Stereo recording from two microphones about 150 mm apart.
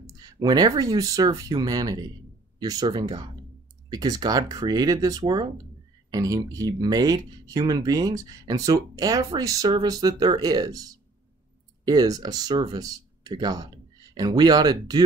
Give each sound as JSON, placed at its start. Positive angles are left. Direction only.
{"t": 0.0, "sound": "speech", "side_deg": -25}